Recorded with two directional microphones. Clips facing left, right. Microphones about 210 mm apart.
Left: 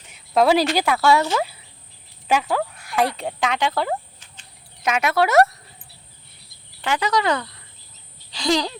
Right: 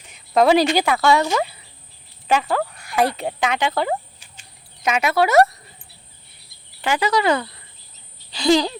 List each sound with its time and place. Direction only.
0.1 s speech: centre (ahead or behind)
1.4 s a sound: centre (ahead or behind)
2.2 s speech: 5° left (ahead or behind)
4.2 s chicken: 10° right (ahead or behind)
4.8 s speech: centre (ahead or behind)
6.8 s speech: 5° right (ahead or behind)
8.3 s a sound: 5° right (ahead or behind)